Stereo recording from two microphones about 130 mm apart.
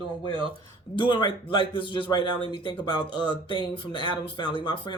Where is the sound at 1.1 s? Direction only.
35° left (ahead or behind).